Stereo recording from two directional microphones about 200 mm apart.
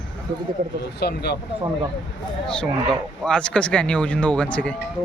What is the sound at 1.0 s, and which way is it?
Speech, 55° left (ahead or behind).